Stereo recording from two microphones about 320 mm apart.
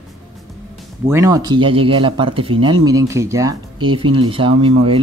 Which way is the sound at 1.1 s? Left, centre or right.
Centre.